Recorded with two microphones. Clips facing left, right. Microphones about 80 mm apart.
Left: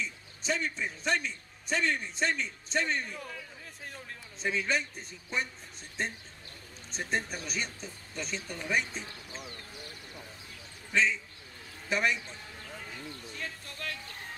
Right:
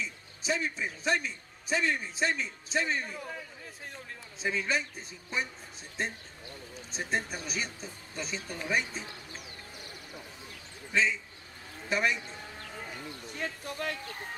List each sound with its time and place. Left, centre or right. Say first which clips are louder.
0.0 s a man's voice: even; centre
10.9 s a man's voice: even; centre
12.8 s a sound: right 2 dB; centre
13.3 s speech: right 9 dB; centre